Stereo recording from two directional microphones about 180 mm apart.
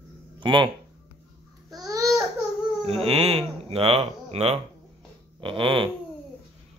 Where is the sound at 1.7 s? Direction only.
20° right (ahead or behind).